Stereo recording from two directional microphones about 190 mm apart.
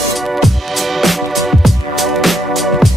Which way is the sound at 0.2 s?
Centre (ahead or behind).